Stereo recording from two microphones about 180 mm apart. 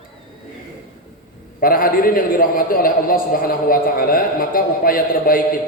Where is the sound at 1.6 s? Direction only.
50° left (ahead or behind).